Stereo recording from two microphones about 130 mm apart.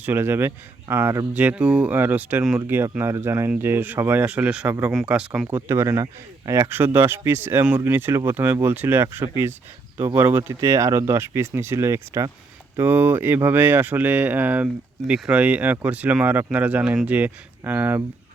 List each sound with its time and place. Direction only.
0.0 s speech: 15° right (ahead or behind)
5.5 s speech: 15° right (ahead or behind)